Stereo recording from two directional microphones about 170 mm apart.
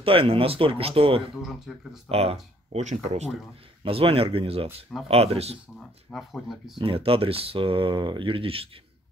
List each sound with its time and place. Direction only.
0.0 s speech: 30° right (ahead or behind)
1.7 s speech: 5° right (ahead or behind)
2.0 s speech: 35° right (ahead or behind)
5.8 s speech: centre (ahead or behind)
6.8 s speech: 35° right (ahead or behind)